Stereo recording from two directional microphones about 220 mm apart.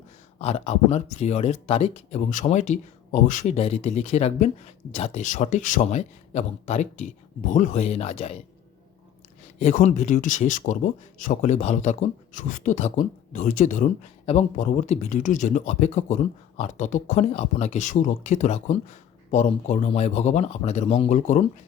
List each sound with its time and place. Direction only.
0.3 s speech: 30° left (ahead or behind)
9.6 s speech: 30° left (ahead or behind)